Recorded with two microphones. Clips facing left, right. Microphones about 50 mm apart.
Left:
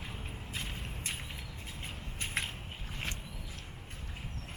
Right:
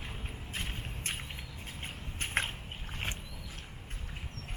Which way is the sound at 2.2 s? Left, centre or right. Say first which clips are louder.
Right 3 dB; right.